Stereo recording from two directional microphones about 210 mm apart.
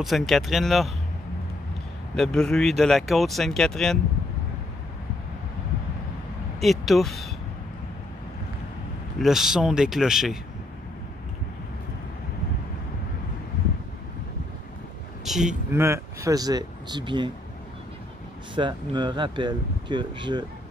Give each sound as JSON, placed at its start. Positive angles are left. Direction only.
{"t": 0.0, "sound": "speech", "side_deg": 0}
{"t": 2.1, "sound": "speech", "side_deg": 5}
{"t": 6.6, "sound": "speech", "side_deg": 0}
{"t": 9.2, "sound": "speech", "side_deg": 0}
{"t": 15.2, "sound": "speech", "side_deg": 0}
{"t": 18.5, "sound": "speech", "side_deg": -20}